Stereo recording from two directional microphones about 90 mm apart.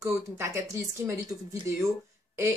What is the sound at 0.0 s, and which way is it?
Speech, 30° right (ahead or behind).